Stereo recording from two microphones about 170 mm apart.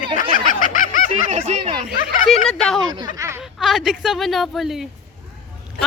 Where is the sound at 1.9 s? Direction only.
50° left (ahead or behind).